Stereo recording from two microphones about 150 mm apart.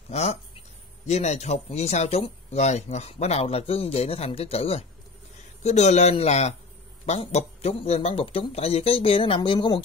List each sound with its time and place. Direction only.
0.1 s speech: 45° left (ahead or behind)